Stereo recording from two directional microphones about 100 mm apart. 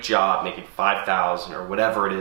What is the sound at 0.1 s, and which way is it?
Speech, 15° right (ahead or behind).